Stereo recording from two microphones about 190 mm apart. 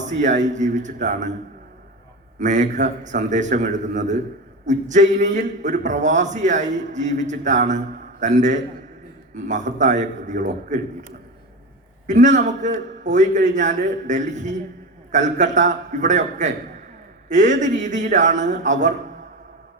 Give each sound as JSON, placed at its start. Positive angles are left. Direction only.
{"t": 0.0, "sound": "a man's voice", "side_deg": -40}
{"t": 2.4, "sound": "a man's voice", "side_deg": -40}
{"t": 12.0, "sound": "a man's voice", "side_deg": -40}